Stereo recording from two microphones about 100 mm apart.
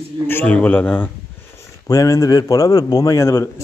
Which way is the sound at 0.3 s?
20° left (ahead or behind).